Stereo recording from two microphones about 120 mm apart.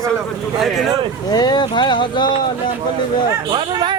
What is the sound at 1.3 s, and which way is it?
Speech, 35° left (ahead or behind).